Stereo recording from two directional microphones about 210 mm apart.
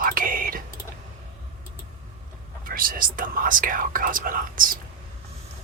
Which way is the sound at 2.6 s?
40° right (ahead or behind).